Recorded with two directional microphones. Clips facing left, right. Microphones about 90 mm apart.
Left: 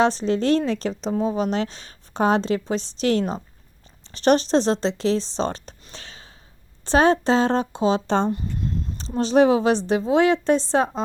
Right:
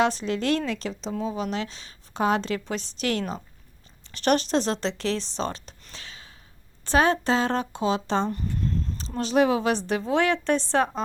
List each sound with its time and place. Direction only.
0.0 s speech: 30° left (ahead or behind)
2.4 s a woman's voice: 25° left (ahead or behind)
5.5 s speech: 40° left (ahead or behind)
5.9 s gasp: 35° left (ahead or behind)
6.8 s a woman's voice: 25° left (ahead or behind)
8.3 s a sound: 20° left (ahead or behind)
9.0 s a woman's voice: 30° left (ahead or behind)